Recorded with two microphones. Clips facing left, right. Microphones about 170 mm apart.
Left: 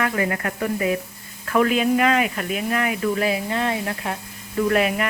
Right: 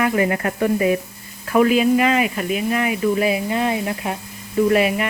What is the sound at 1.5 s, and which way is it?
Speech, 10° right (ahead or behind).